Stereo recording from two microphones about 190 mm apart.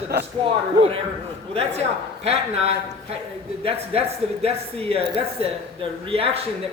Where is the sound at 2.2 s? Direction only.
35° right (ahead or behind).